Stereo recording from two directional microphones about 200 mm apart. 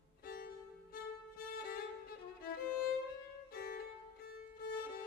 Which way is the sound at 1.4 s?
45° left (ahead or behind).